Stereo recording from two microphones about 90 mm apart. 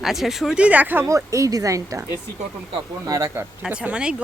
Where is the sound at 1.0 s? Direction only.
35° right (ahead or behind).